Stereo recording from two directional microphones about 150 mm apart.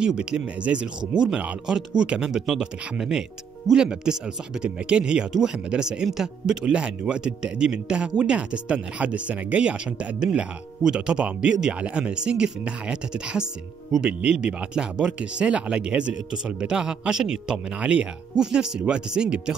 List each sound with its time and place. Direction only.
0.0 s speech: 5° right (ahead or behind)